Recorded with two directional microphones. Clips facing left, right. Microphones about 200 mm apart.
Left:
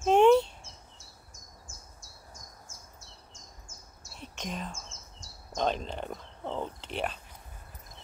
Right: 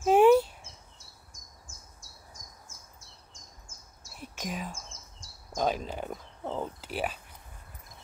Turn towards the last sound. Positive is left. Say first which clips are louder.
# right 1 dB
turn(degrees=-5)  # may be behind; listen again after turning